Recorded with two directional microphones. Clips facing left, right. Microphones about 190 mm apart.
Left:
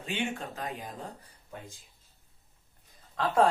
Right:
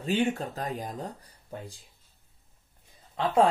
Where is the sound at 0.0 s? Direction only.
35° right (ahead or behind).